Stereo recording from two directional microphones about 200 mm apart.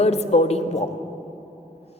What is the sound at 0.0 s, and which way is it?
Speech, 30° left (ahead or behind).